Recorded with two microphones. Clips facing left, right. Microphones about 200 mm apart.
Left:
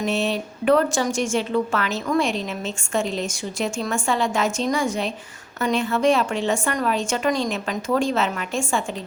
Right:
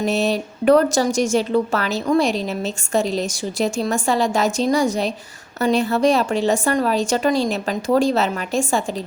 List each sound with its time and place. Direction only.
0.0 s speech: 40° right (ahead or behind)